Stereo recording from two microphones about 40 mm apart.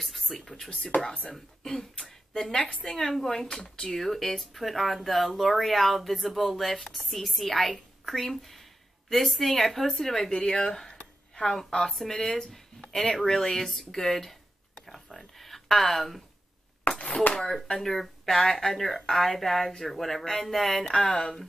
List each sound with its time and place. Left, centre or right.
0.2 s speech: centre
0.7 s speech: left
1.3 s speech: centre
3.0 s speech: centre
3.6 s speech: centre
3.9 s speech: centre
14.8 s a sound: centre
17.0 s a sound: left
17.3 s speech: centre
20.9 s speech: left
21.2 s speech: centre